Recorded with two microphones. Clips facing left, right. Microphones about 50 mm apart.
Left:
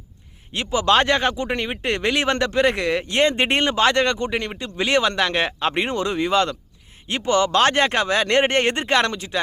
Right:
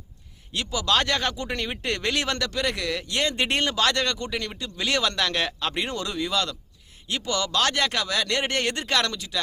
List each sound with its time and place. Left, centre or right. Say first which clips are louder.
0.5 s speech: left 6 dB; left